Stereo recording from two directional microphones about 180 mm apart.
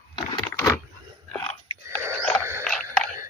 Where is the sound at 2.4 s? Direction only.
15° right (ahead or behind).